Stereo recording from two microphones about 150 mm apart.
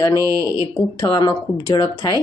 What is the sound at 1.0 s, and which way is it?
Speech, 25° left (ahead or behind).